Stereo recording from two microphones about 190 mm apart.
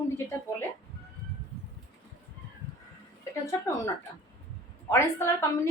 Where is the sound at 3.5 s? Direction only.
15° left (ahead or behind).